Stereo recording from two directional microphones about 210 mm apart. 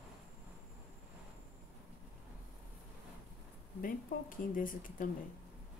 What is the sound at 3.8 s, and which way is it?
A woman's voice, 40° left (ahead or behind).